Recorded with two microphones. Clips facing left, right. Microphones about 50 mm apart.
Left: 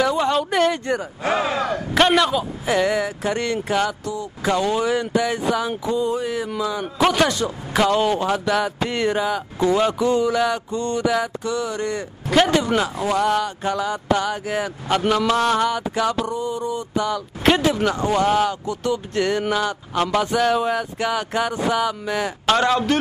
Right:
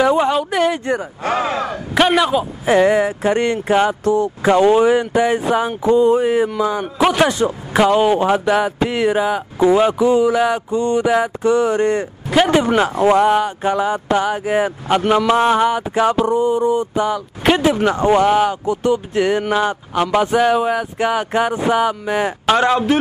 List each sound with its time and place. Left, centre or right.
0.0 s a sound: right
0.3 s a sound: centre
0.8 s a man's voice: right
2.6 s speech: right
4.0 s speech: right
4.4 s speech: right
6.8 s a man's voice: centre
12.8 s speech: right; by 17.8 s centre
17.8 s speech: right
19.5 s speech: right
19.9 s a man's voice: centre